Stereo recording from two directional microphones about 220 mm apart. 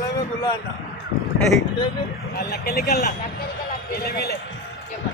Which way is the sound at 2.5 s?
45° left (ahead or behind).